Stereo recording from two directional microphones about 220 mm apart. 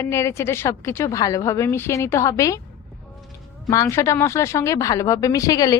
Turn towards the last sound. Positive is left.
turn(degrees=15)  # may be behind; listen again after turning